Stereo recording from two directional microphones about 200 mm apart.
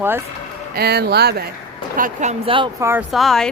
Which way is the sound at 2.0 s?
35° right (ahead or behind).